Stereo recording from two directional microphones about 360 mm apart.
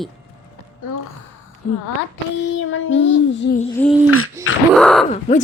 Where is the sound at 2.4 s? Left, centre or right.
Left.